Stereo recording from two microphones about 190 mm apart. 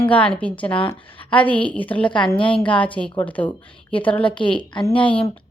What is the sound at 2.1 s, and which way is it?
Speech, 25° left (ahead or behind).